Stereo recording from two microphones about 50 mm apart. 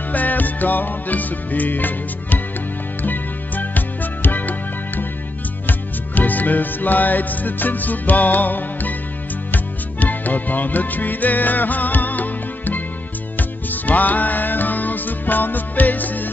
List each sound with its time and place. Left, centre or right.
0.1 s music: left